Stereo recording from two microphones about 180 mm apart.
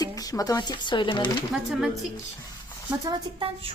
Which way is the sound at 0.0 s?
20° left (ahead or behind).